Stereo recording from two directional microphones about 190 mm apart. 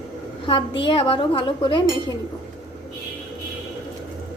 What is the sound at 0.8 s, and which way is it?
Speech, 25° left (ahead or behind).